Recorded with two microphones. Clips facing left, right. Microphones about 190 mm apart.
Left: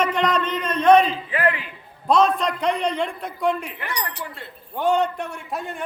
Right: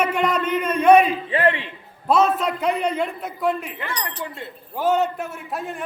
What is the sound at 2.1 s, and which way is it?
A man's voice, 5° right (ahead or behind).